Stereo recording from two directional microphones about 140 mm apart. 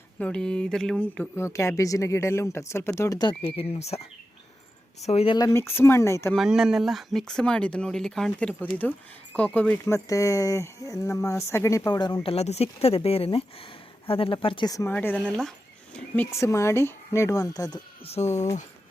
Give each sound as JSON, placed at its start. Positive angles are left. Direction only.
{"t": 0.2, "sound": "speech", "side_deg": 5}
{"t": 5.4, "sound": "speech", "side_deg": 15}
{"t": 6.3, "sound": "speech", "side_deg": -5}
{"t": 9.8, "sound": "speech", "side_deg": 20}
{"t": 12.2, "sound": "speech", "side_deg": 45}
{"t": 14.9, "sound": "speech", "side_deg": 10}
{"t": 18.0, "sound": "speech", "side_deg": 50}